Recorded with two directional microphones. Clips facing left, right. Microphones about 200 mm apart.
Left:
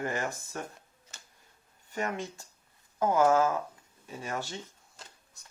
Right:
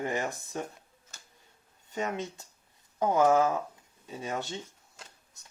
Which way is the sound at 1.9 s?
20° right (ahead or behind).